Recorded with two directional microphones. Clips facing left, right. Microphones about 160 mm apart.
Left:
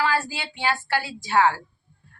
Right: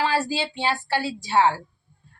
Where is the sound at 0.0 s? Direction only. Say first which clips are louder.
Right 2 dB; 30° right (ahead or behind).